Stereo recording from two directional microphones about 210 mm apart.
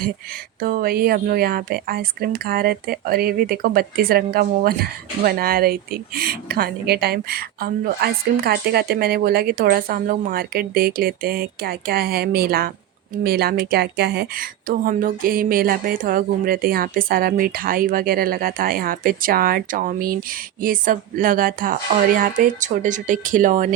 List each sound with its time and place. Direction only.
0.6 s speech: 45° right (ahead or behind)